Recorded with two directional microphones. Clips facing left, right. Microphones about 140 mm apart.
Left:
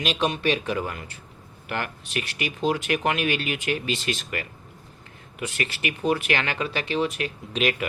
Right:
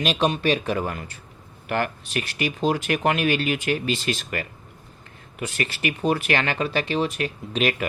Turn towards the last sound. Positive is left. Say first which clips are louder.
# right 1 dB
turn(degrees=-40)  # may be behind; listen again after turning